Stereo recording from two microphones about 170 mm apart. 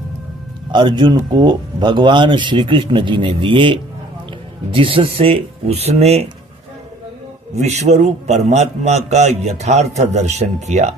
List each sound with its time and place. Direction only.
0.7 s a man's voice: 25° right (ahead or behind)
7.5 s a man's voice: 40° right (ahead or behind)